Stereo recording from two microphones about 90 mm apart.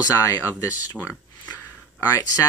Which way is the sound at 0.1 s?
40° left (ahead or behind).